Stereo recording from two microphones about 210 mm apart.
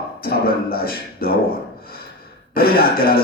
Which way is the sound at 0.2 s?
45° left (ahead or behind).